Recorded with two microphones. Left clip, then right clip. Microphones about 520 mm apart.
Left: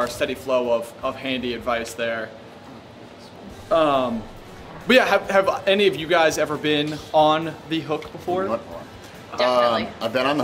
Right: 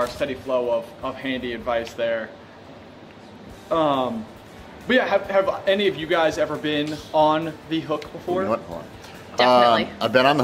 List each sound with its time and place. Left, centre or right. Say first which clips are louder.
0.2 s speech: left 1 dB; right
3.7 s speech: left 2 dB; right
4.8 s a man's voice: left 3 dB; centre
9.4 s speech: right 3 dB; right